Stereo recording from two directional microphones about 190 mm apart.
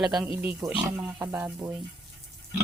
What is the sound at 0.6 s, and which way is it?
Speech, 20° right (ahead or behind).